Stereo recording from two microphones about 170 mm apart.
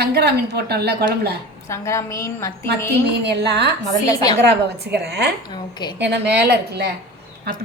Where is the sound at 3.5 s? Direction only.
80° right.